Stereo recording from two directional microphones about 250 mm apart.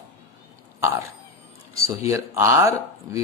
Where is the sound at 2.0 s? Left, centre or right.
Centre.